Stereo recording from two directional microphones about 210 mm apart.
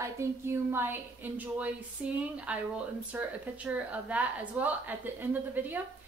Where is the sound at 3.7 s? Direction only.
5° right (ahead or behind).